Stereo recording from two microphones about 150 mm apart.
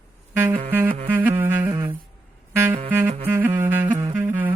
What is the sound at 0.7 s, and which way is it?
Music, 15° right (ahead or behind).